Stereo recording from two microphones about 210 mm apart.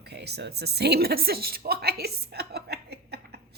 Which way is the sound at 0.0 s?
50° right (ahead or behind).